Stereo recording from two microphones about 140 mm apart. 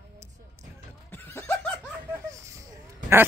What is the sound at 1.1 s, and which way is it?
Neigh, 15° left (ahead or behind).